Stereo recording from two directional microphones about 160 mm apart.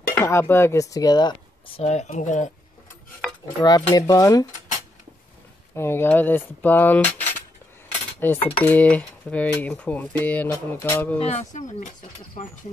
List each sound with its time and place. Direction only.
0.1 s speech: 15° left (ahead or behind)
1.8 s speech: 45° left (ahead or behind)
3.6 s speech: 25° left (ahead or behind)
5.8 s speech: 15° left (ahead or behind)
8.2 s speech: 10° left (ahead or behind)
11.1 s speech: 40° left (ahead or behind)